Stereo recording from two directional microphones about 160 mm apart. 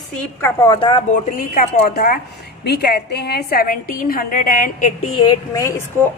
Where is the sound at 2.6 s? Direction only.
90° left; by 4.9 s 55° left (ahead or behind).